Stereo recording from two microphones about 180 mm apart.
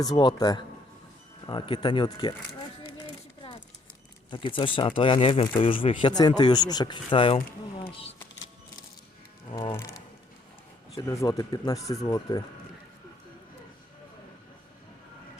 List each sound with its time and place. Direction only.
0.0 s speech: 20° left (ahead or behind)
4.3 s speech: 30° left (ahead or behind)
7.8 s a sound: 30° left (ahead or behind)
9.5 s speech: 30° left (ahead or behind)
9.7 s speech: 15° left (ahead or behind)